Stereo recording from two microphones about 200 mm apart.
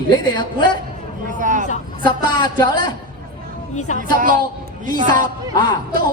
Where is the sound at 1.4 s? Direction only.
40° right (ahead or behind).